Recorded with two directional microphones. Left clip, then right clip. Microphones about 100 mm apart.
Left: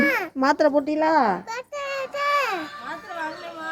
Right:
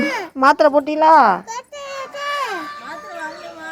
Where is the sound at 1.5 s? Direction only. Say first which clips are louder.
Even; 15° left (ahead or behind).